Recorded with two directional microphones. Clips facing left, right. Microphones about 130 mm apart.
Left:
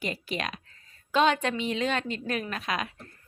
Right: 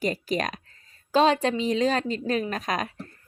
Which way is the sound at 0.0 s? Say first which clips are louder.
Right 6 dB; 40° right (ahead or behind).